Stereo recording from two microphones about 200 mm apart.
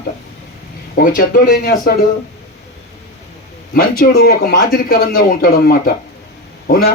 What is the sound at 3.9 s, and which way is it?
Speech, 50° left (ahead or behind).